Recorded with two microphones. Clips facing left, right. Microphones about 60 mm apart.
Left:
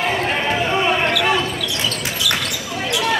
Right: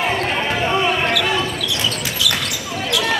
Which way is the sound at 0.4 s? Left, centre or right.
Centre.